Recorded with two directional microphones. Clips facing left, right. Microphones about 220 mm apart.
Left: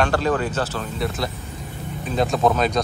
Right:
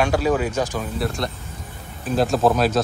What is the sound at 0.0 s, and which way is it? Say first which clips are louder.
Speech: right 1 dB; 10° right (ahead or behind).